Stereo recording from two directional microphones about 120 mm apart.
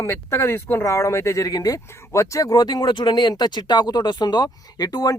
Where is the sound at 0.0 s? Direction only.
25° left (ahead or behind).